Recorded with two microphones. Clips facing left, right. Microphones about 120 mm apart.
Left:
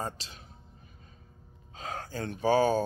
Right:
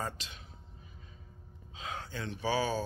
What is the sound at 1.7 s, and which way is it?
Speech, 45° left (ahead or behind).